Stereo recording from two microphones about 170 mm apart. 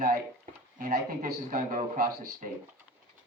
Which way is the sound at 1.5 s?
50° right (ahead or behind).